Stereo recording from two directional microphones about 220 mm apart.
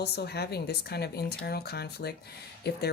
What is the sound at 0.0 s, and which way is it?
Speech, 45° left (ahead or behind).